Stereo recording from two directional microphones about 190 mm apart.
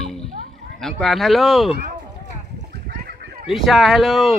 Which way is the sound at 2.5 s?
55° right (ahead or behind).